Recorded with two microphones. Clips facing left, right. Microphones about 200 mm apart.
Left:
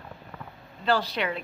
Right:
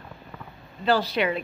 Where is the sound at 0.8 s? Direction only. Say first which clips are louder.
Right 3 dB; 10° right (ahead or behind).